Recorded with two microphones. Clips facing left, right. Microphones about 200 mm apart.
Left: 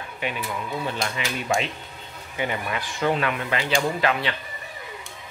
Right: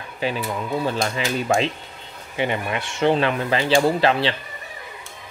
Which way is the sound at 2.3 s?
25° right (ahead or behind).